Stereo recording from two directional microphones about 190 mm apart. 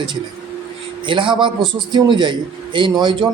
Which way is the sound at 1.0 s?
25° right (ahead or behind).